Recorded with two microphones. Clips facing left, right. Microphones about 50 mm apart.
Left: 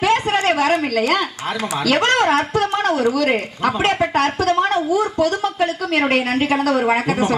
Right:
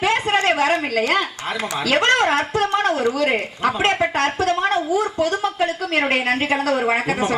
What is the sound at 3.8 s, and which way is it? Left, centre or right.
A woman's voice, centre.